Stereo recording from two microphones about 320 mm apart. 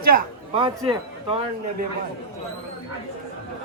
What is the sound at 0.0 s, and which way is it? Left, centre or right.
Speech, right.